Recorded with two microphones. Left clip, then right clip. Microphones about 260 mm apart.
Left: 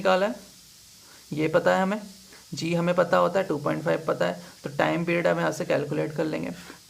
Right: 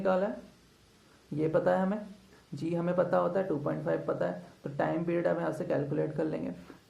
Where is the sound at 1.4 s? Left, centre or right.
Left.